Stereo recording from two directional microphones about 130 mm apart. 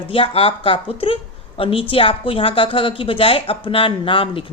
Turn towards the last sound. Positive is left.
turn(degrees=40)  # may be behind; listen again after turning